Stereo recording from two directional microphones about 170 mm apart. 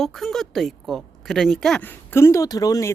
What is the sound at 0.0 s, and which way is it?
A woman's voice, centre (ahead or behind).